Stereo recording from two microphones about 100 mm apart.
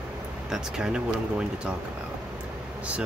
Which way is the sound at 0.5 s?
5° right (ahead or behind).